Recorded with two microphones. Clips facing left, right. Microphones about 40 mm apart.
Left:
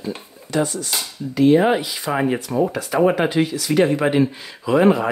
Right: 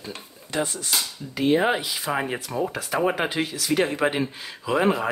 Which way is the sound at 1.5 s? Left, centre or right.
Centre.